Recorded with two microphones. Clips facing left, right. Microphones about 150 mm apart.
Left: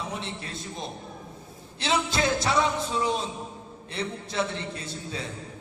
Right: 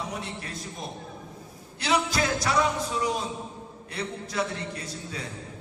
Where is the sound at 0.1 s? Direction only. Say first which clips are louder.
Even; 25° left (ahead or behind).